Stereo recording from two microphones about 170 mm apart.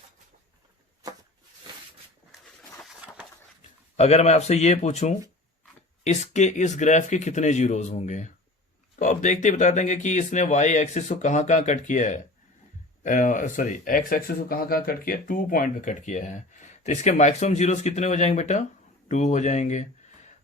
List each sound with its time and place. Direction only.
3.9 s speech: 40° left (ahead or behind)